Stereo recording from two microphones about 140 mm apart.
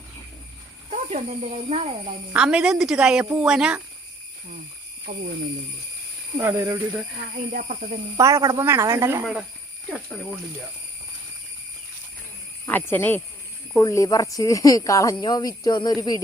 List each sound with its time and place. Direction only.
0.9 s speech: 50° right (ahead or behind)
2.3 s a woman's voice: 5° right (ahead or behind)
5.1 s speech: 90° right
6.3 s speech: 20° right (ahead or behind)
7.3 s speech: 75° right (ahead or behind)
8.1 s speech: 25° right (ahead or behind)
12.6 s speech: 15° left (ahead or behind)